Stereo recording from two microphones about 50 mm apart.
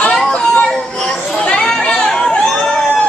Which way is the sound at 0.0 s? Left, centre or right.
Left.